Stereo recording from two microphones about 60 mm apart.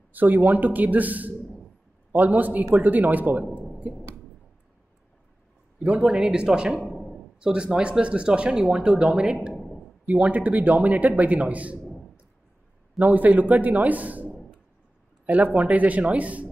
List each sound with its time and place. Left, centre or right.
0.1 s speech: right
6.0 s speech: centre
6.9 s a sound: centre
7.3 s speech: centre
9.5 s a sound: centre
10.2 s speech: right
13.0 s speech: right